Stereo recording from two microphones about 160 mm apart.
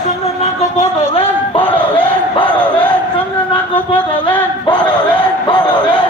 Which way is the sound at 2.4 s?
10° left (ahead or behind).